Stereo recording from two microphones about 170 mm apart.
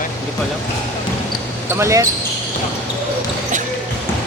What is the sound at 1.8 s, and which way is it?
Speech, 15° right (ahead or behind).